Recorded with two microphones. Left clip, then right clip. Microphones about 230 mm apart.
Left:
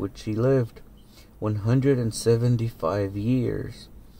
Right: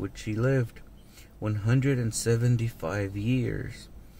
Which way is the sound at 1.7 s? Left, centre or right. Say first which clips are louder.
Left 6 dB; centre.